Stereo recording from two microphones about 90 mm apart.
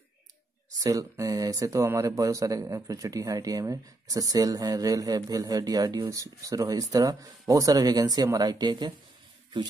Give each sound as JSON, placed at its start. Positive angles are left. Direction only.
{"t": 0.7, "sound": "speech", "side_deg": -40}